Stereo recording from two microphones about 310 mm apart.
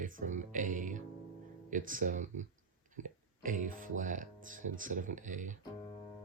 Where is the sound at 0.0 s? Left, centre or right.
Right.